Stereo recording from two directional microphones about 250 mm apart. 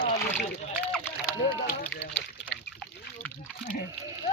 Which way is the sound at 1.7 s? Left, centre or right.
Left.